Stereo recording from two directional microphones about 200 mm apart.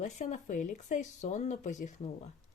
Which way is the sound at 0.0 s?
35° left (ahead or behind).